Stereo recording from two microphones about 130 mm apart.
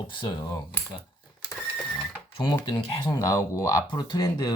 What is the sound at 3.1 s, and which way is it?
Speech, 25° left (ahead or behind).